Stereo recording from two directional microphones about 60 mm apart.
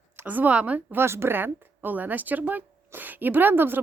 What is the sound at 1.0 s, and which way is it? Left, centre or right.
Speech, right.